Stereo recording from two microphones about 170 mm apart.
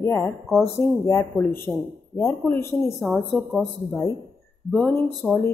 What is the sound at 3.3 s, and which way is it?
Speech, centre (ahead or behind).